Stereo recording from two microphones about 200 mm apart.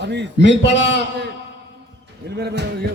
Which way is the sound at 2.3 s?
55° right (ahead or behind).